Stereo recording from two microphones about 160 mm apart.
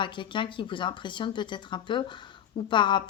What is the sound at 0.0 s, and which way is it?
Speech, 30° left (ahead or behind).